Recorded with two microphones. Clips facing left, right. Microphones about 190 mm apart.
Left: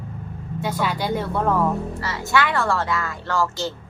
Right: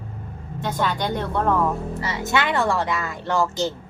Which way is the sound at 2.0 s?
20° right (ahead or behind).